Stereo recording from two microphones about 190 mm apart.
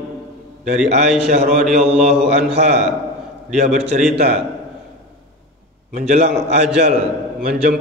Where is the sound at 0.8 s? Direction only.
35° right (ahead or behind).